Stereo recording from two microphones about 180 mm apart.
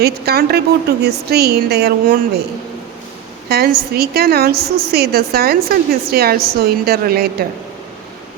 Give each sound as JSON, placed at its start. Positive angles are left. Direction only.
{"t": 0.0, "sound": "a woman's voice", "side_deg": -60}
{"t": 3.5, "sound": "a woman's voice", "side_deg": -60}